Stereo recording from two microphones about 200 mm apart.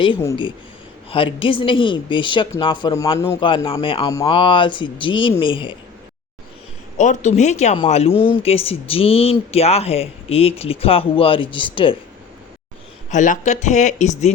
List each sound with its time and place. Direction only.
1.1 s speech: 25° left (ahead or behind)
3.4 s speech: 25° left (ahead or behind)
7.0 s speech: 35° left (ahead or behind)
13.1 s speech: 40° left (ahead or behind)